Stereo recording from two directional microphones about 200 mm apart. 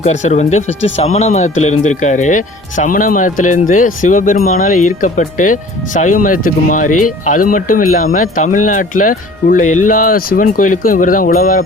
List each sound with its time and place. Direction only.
0.0 s speech: 35° left (ahead or behind)